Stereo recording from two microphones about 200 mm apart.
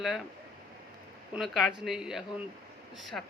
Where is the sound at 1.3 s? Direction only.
Centre (ahead or behind).